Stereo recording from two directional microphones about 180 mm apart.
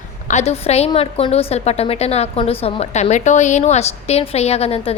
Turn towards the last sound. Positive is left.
turn(degrees=35)  # may be behind; listen again after turning